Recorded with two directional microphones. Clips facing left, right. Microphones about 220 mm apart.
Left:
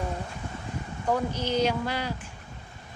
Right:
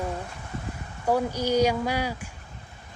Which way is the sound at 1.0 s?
10° right (ahead or behind).